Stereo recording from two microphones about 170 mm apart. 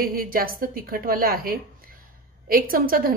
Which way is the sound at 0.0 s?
60° right (ahead or behind).